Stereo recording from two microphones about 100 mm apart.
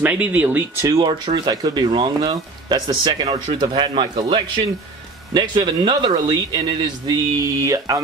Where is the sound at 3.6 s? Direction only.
50° right (ahead or behind).